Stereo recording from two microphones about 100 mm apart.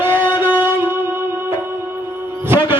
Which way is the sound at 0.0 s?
20° right (ahead or behind).